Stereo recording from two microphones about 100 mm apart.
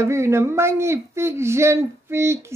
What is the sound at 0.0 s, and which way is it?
Speech, 25° right (ahead or behind).